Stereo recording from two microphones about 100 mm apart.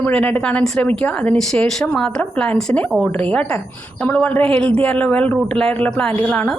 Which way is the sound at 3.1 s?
15° left (ahead or behind).